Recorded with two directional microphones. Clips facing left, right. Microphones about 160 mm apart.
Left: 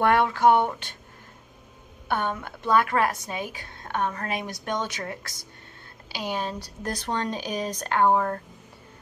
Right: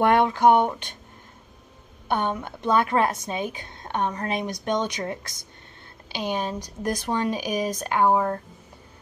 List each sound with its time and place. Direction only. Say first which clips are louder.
0.0 s a woman's voice: right 2 dB; 20° right (ahead or behind)
2.0 s a woman's voice: right 2 dB; 20° right (ahead or behind)